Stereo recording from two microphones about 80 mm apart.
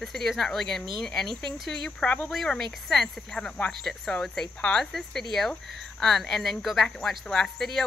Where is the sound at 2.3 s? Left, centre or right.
Centre.